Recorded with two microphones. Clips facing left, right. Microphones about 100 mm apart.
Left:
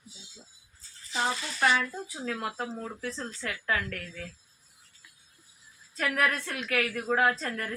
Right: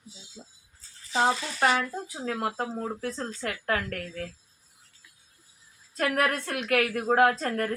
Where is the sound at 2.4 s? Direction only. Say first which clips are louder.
Right 4 dB; 45° right (ahead or behind).